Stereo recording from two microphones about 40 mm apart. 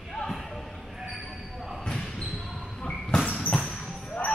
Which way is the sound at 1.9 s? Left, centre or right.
Left.